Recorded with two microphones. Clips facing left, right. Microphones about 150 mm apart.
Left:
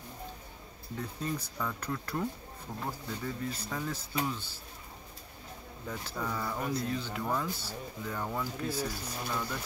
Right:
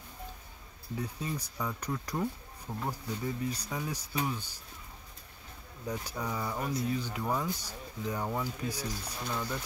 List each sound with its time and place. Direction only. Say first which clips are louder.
0.9 s speech: even; 10° right (ahead or behind)
5.9 s speech: right 1 dB; 15° right (ahead or behind)
6.6 s speech: right 1 dB; centre (ahead or behind)